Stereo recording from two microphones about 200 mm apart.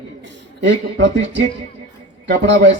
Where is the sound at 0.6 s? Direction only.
65° right (ahead or behind).